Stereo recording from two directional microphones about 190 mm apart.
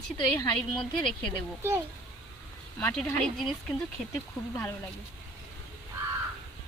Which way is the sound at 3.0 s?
Centre (ahead or behind).